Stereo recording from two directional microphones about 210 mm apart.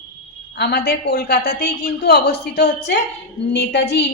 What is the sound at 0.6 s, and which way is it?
A woman's voice, 50° left (ahead or behind).